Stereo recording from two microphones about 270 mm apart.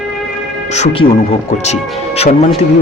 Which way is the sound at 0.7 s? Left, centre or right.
Left.